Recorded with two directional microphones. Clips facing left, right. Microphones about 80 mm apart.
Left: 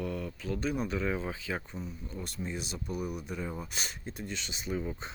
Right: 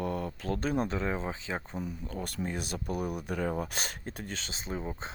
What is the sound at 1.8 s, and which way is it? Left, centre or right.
Speech, right.